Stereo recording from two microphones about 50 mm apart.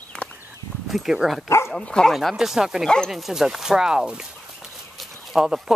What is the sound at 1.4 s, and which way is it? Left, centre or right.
Speech, left.